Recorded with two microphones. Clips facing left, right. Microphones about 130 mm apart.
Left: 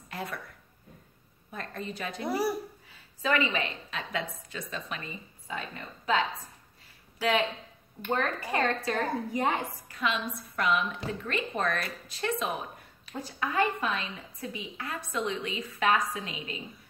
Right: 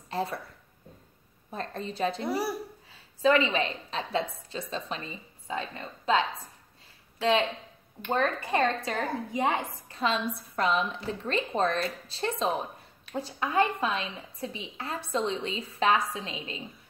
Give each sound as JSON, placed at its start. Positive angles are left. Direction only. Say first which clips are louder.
{"t": 0.1, "sound": "speech", "louder": "right 6 dB", "side_deg": -30}
{"t": 1.5, "sound": "a woman's voice", "louder": "right 3 dB", "side_deg": -30}
{"t": 2.2, "sound": "speech", "louder": "left 1 dB", "side_deg": 0}
{"t": 3.2, "sound": "a woman's voice", "louder": "right 5 dB", "side_deg": -30}
{"t": 7.2, "sound": "a woman's voice", "louder": "right 2 dB", "side_deg": -25}
{"t": 9.8, "sound": "a woman's voice", "louder": "right 4 dB", "side_deg": -30}